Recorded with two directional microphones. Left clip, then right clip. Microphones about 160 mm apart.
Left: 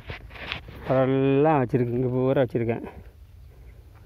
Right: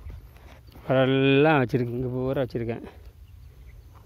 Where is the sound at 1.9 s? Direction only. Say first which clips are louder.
Left 5 dB; 35° left (ahead or behind).